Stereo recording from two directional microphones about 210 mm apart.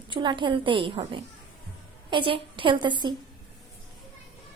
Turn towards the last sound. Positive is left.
turn(degrees=-20)  # may be behind; listen again after turning